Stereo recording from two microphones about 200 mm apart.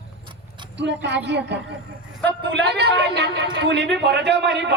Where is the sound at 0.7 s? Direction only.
60° right (ahead or behind).